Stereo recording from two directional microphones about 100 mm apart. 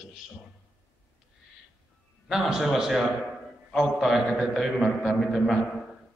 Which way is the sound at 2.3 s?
5° right (ahead or behind).